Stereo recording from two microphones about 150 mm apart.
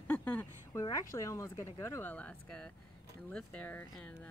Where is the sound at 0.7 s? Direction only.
20° left (ahead or behind).